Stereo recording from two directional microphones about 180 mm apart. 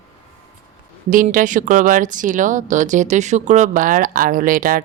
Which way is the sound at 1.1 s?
50° right (ahead or behind).